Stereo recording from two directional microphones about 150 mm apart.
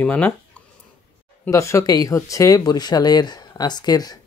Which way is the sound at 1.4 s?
20° left (ahead or behind).